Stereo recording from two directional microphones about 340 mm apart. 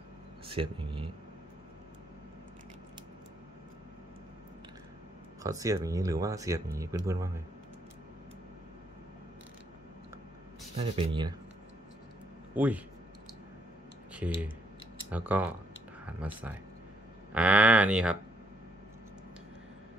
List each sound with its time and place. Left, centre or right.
0.5 s speech: centre
5.4 s speech: centre
10.8 s speech: centre
12.5 s speech: centre
15.0 s speech: centre